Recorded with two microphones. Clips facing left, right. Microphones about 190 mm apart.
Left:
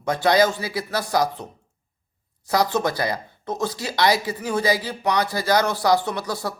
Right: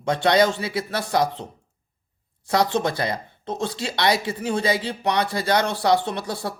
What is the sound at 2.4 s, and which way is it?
Speech, 25° right (ahead or behind).